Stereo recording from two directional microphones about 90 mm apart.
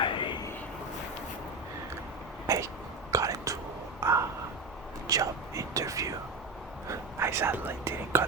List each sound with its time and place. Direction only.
0.0 s vehicle: 70° left (ahead or behind)
2.5 s a sound: 35° right (ahead or behind)
3.1 s whispering: 40° right (ahead or behind)
4.0 s crow: 30° right (ahead or behind)
5.0 s whispering: 40° right (ahead or behind)